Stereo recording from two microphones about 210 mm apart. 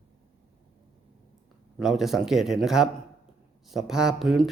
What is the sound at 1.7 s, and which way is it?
Speech, centre (ahead or behind).